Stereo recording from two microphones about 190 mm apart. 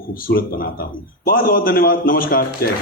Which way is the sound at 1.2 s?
50° left (ahead or behind).